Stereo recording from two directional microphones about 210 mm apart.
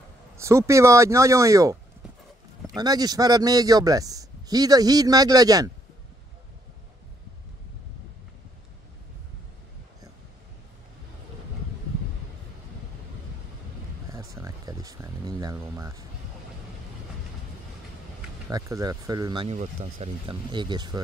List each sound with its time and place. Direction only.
0.4 s speech: 15° right (ahead or behind)
14.0 s a sound: 15° right (ahead or behind)
18.5 s speech: 15° right (ahead or behind)